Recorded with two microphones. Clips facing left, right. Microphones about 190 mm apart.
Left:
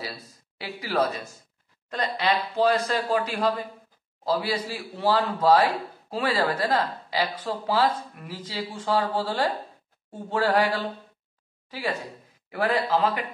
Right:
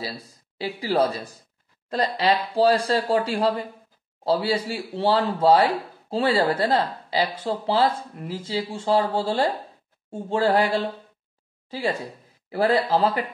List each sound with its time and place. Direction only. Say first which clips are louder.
0.0 s a man's voice: right 3 dB; 30° right (ahead or behind)